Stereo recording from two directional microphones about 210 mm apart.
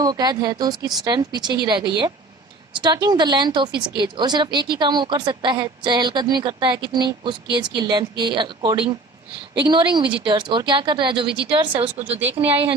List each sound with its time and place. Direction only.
0.0 s speech: 20° right (ahead or behind)
12.2 s speech: 10° right (ahead or behind)